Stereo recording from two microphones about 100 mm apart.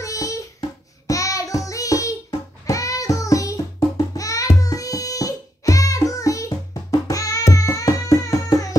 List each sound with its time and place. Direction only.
0.0 s child singing: 35° left (ahead or behind)
2.6 s music: 35° left (ahead or behind)